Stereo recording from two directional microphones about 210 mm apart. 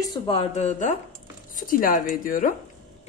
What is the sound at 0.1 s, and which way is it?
A woman's voice, 25° left (ahead or behind).